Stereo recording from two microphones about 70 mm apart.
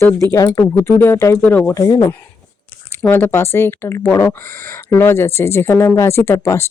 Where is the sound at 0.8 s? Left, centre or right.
Left.